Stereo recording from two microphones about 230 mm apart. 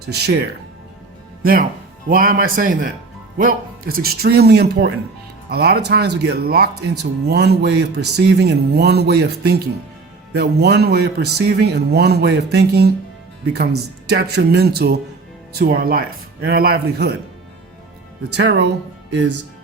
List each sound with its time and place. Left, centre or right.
0.1 s speech: right
1.4 s a man's voice: right
14.1 s a man's voice: right
18.3 s speech: right